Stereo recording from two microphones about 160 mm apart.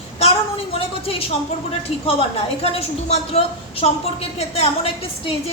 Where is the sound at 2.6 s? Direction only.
40° left (ahead or behind).